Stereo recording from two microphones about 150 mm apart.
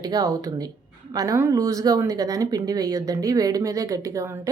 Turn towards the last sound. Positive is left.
turn(degrees=-20)  # may be behind; listen again after turning